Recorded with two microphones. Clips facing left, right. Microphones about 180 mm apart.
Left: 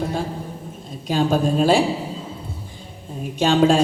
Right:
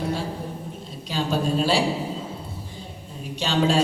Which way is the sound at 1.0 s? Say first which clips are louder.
Left 6 dB; 50° left (ahead or behind).